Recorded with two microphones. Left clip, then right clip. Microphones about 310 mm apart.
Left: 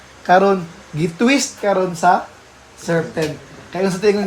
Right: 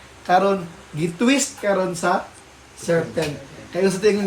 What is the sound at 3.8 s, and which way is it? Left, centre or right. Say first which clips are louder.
Speech: left 2 dB; centre.